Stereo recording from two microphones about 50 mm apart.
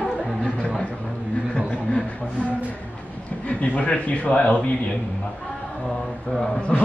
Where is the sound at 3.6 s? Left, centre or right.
Left.